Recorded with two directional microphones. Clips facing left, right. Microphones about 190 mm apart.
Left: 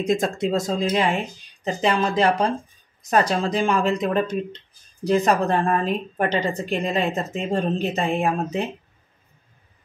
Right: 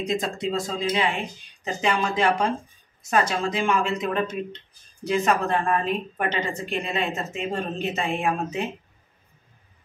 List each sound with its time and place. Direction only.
0.0 s speech: 45° left (ahead or behind)